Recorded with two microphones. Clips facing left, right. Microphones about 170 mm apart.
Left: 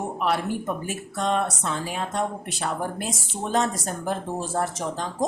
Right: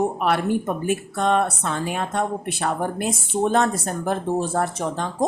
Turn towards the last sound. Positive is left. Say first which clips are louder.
# right 3 dB
turn(degrees=-60)  # may be behind; listen again after turning